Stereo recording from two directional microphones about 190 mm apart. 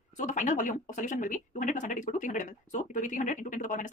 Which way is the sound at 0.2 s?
40° left (ahead or behind).